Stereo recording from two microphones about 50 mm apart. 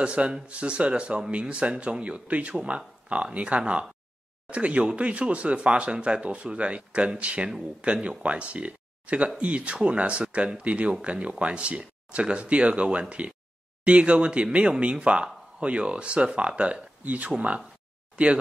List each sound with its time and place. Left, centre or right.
0.0 s speech: right
18.1 s speech: right